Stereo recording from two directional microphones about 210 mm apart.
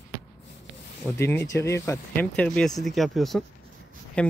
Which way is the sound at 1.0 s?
15° left (ahead or behind).